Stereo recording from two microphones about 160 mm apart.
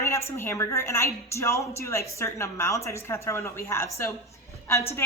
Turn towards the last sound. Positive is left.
turn(degrees=15)  # may be behind; listen again after turning